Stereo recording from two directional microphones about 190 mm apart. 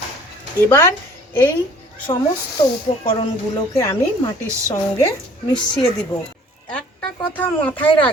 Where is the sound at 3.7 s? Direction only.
20° left (ahead or behind).